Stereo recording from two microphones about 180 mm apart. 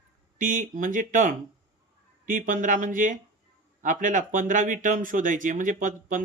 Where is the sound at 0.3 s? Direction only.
45° right (ahead or behind).